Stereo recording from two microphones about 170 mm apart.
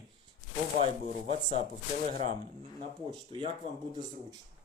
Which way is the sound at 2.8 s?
30° right (ahead or behind).